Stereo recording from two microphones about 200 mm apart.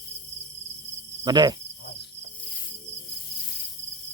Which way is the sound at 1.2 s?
20° right (ahead or behind).